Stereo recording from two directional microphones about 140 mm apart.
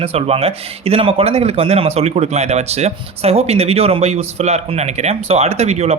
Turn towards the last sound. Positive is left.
turn(degrees=-50)  # may be behind; listen again after turning